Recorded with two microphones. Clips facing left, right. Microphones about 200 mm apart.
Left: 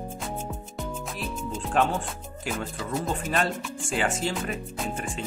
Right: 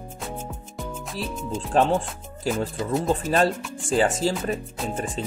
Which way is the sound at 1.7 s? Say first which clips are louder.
Right 5 dB; 35° right (ahead or behind).